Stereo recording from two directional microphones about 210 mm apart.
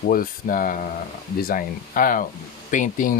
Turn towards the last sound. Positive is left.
turn(degrees=40)  # may be behind; listen again after turning